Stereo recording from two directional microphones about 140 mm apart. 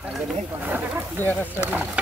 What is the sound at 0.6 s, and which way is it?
Speech, 15° right (ahead or behind).